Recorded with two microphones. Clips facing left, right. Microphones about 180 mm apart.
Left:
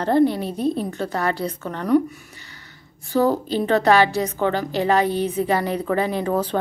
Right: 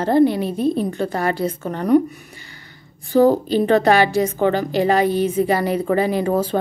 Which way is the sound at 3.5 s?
15° right (ahead or behind).